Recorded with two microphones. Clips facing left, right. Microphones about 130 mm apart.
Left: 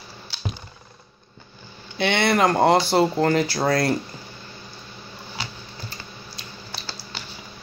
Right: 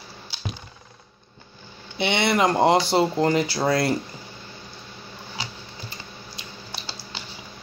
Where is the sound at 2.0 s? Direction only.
20° right (ahead or behind).